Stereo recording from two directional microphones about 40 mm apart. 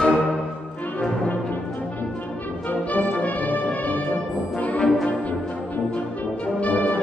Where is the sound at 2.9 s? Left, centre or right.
Left.